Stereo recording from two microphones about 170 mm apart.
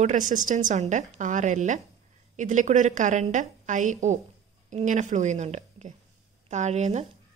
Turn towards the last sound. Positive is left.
turn(degrees=-45)  # may be behind; listen again after turning